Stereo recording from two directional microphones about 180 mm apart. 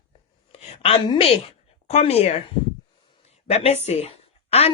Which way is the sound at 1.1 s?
35° left (ahead or behind).